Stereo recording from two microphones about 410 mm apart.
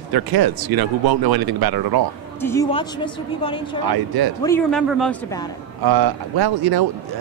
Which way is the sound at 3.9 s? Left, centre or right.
Right.